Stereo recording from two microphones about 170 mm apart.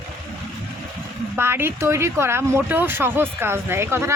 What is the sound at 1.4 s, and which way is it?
Speech, 15° right (ahead or behind).